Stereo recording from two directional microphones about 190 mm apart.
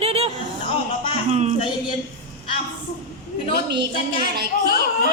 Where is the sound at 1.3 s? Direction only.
35° right (ahead or behind).